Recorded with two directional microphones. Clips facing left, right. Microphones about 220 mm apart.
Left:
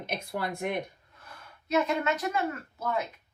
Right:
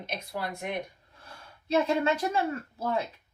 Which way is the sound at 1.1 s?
30° right (ahead or behind).